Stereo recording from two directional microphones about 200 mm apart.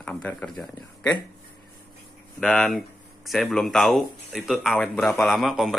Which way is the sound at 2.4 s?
5° left (ahead or behind).